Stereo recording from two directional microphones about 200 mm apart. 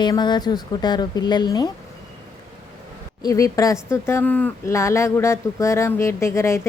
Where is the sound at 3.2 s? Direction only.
15° left (ahead or behind).